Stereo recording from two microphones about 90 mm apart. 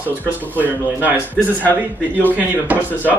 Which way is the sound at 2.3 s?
20° right (ahead or behind).